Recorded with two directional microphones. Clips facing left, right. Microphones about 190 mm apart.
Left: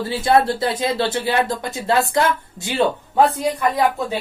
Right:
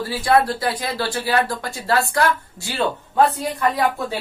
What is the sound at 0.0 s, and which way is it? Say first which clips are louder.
Speech: left 1 dB; 25° left (ahead or behind).